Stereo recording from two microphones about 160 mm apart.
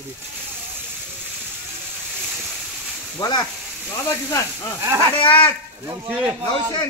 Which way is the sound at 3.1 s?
25° left (ahead or behind).